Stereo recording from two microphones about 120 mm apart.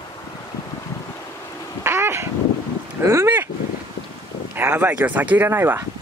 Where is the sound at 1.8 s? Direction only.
20° right (ahead or behind).